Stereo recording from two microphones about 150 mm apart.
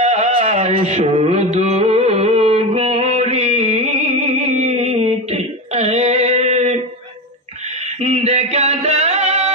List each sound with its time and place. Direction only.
0.0 s carnatic music: 45° right (ahead or behind)
8.0 s music: 45° right (ahead or behind)